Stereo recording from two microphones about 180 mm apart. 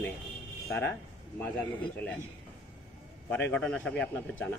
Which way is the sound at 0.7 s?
10° left (ahead or behind).